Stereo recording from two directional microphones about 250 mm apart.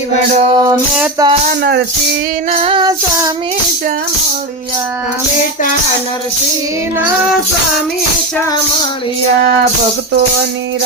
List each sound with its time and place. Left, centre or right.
0.4 s music: centre
2.5 s music: right